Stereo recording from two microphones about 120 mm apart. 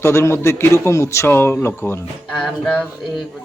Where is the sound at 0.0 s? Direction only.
20° left (ahead or behind).